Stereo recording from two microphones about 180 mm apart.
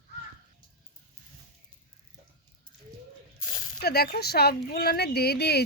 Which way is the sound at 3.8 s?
60° left (ahead or behind).